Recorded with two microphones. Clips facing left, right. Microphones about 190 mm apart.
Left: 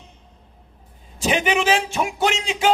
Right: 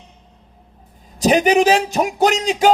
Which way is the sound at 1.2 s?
40° right (ahead or behind).